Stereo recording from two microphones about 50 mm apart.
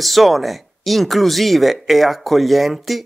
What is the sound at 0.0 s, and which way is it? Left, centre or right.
Speech, centre.